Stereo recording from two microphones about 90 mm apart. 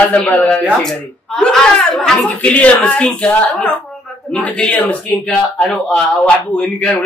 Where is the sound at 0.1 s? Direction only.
15° left (ahead or behind).